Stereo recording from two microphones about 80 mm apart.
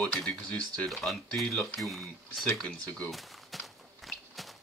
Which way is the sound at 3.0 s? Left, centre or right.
Centre.